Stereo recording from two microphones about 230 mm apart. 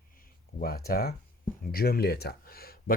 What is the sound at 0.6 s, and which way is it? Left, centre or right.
Speech, left.